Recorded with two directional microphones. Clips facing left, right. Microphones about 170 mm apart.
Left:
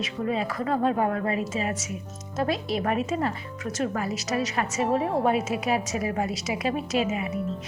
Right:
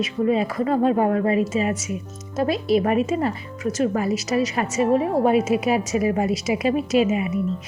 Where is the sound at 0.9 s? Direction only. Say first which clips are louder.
Right 6 dB; 25° right (ahead or behind).